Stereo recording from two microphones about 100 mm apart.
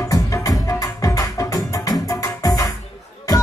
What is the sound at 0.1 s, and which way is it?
Music, 35° left (ahead or behind).